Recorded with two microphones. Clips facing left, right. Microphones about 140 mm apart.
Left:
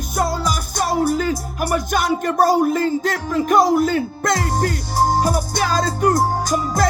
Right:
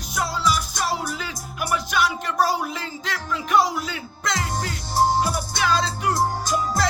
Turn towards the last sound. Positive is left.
turn(degrees=45)  # may be behind; listen again after turning